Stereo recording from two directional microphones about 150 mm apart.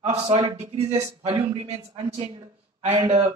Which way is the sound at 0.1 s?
45° right (ahead or behind).